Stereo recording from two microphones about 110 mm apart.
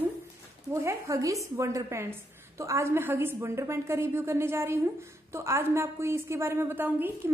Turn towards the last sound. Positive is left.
turn(degrees=-20)  # may be behind; listen again after turning